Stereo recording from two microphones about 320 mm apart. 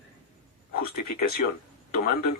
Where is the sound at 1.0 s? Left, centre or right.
Left.